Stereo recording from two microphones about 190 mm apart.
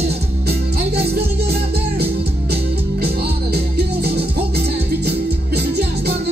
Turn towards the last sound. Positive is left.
turn(degrees=-55)  # may be behind; listen again after turning